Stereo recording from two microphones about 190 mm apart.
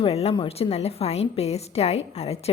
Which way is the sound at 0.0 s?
35° left (ahead or behind).